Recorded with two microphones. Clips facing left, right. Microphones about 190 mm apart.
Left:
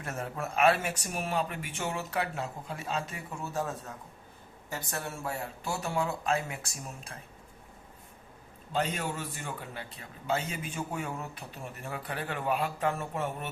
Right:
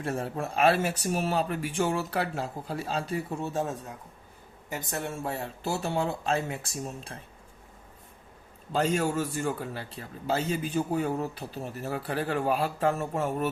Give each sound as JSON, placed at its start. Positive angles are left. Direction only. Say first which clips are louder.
{"t": 0.0, "sound": "a man's voice", "louder": "right 5 dB", "side_deg": -30}
{"t": 8.7, "sound": "a man's voice", "louder": "right 6 dB", "side_deg": -45}